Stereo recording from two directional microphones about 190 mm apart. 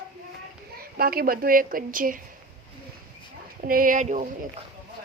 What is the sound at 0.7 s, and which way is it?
Speech, 50° right (ahead or behind).